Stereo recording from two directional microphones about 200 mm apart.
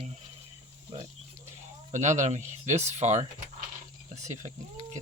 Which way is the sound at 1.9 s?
35° right (ahead or behind).